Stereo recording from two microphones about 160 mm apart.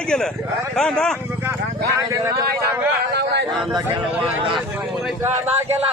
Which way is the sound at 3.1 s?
90° right.